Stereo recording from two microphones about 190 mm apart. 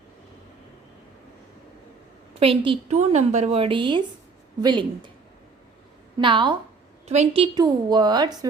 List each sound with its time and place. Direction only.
2.4 s a woman's voice: 30° right (ahead or behind)
6.1 s a woman's voice: 25° right (ahead or behind)